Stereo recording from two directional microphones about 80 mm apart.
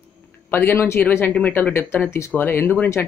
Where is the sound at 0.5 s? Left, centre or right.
Left.